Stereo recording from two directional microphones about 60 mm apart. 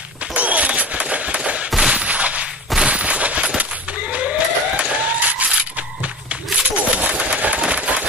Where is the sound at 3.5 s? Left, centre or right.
Right.